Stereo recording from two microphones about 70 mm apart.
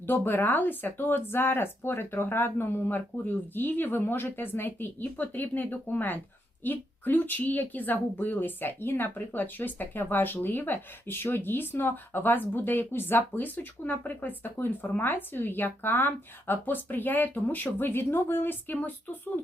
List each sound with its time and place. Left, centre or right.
0.1 s a woman's voice: left